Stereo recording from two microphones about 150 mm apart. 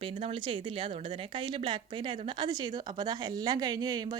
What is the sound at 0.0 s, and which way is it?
Speech, 35° right (ahead or behind).